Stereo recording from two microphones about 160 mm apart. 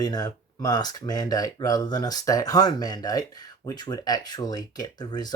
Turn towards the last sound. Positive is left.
turn(degrees=25)  # may be behind; listen again after turning